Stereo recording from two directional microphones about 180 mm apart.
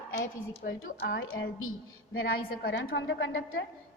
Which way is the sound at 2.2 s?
55° left (ahead or behind).